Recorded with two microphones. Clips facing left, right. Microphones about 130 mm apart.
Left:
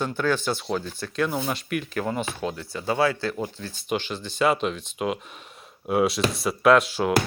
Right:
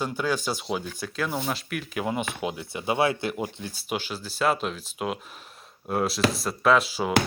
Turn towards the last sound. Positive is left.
turn(degrees=0)  # may be behind; listen again after turning